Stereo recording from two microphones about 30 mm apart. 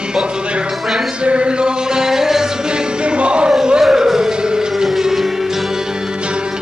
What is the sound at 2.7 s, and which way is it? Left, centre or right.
Music, right.